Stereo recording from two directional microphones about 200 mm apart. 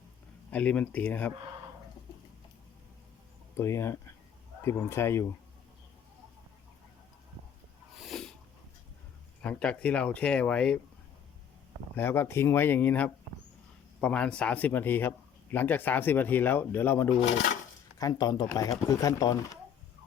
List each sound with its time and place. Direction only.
0.5 s speech: 5° left (ahead or behind)
3.6 s speech: 15° left (ahead or behind)
7.9 s sneeze: centre (ahead or behind)
9.4 s speech: 5° left (ahead or behind)
11.9 s speech: 10° left (ahead or behind)
17.2 s dishes: 35° left (ahead or behind)
18.0 s speech: 20° left (ahead or behind)